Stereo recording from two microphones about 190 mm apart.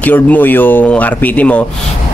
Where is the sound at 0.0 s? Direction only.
10° left (ahead or behind).